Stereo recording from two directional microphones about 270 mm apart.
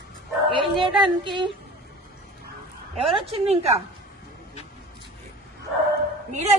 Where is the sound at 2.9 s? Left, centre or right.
Right.